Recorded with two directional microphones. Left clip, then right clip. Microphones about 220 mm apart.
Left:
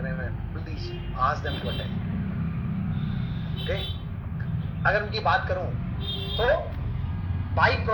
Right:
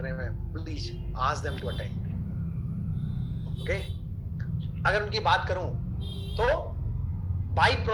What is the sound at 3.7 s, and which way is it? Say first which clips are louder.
Speech: even; 15° right (ahead or behind).